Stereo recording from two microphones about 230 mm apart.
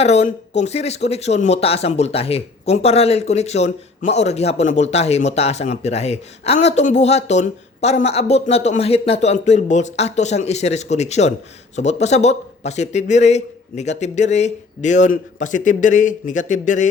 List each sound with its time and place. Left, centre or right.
0.0 s speech: left